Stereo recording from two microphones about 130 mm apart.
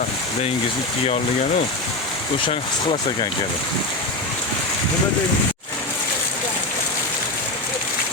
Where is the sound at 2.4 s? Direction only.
40° left (ahead or behind).